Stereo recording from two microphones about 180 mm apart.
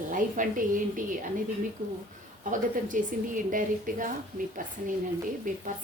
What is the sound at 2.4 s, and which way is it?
A woman's voice, 45° right (ahead or behind).